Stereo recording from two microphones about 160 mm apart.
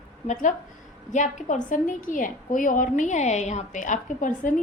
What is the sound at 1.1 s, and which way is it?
A woman's voice, 50° left (ahead or behind).